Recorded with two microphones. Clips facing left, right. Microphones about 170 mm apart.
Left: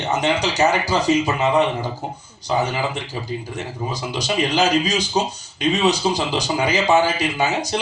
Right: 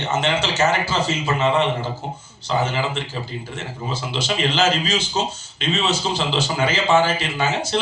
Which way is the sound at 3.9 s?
15° left (ahead or behind).